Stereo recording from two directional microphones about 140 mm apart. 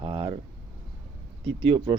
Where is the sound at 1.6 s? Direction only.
35° right (ahead or behind).